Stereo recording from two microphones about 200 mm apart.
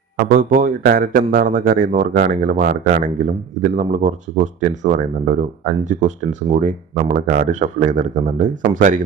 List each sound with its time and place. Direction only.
0.3 s speech: 45° right (ahead or behind)